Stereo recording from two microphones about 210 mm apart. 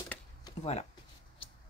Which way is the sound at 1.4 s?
25° left (ahead or behind).